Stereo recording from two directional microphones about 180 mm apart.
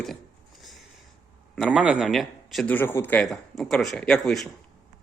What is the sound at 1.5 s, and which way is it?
A man's voice, centre (ahead or behind).